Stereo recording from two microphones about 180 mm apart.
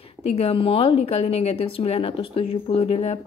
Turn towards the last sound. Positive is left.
turn(degrees=35)  # may be behind; listen again after turning